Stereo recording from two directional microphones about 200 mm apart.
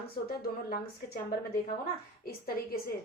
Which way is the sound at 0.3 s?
50° left (ahead or behind).